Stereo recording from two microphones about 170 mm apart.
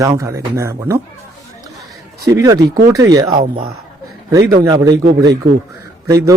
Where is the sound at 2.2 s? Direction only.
20° right (ahead or behind).